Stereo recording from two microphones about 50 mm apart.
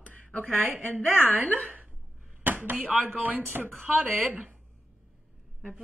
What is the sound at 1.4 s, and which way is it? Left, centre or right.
Speech, left.